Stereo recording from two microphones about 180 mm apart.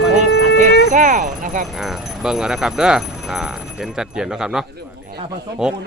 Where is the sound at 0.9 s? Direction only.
45° right (ahead or behind).